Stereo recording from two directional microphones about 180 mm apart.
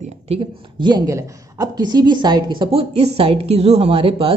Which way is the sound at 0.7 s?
25° right (ahead or behind).